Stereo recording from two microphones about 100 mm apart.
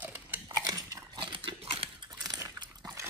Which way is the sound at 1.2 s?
55° right (ahead or behind).